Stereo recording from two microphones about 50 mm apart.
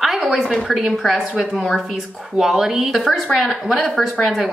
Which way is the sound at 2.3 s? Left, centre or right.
Centre.